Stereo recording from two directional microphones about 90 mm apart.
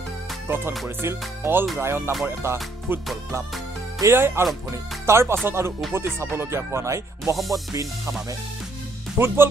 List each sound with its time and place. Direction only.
0.8 s speech: 30° right (ahead or behind)
2.2 s music: 25° right (ahead or behind)
4.0 s speech: 30° right (ahead or behind)
7.3 s music: centre (ahead or behind)
9.2 s speech: 30° right (ahead or behind)